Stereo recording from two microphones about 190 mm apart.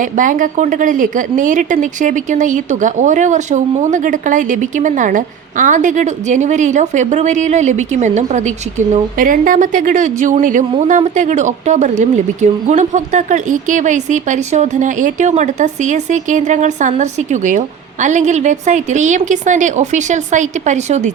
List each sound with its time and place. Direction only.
0.0 s speech: 45° right (ahead or behind)